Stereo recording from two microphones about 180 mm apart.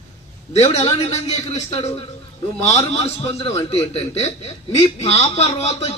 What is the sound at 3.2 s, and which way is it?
A man's voice, 30° left (ahead or behind).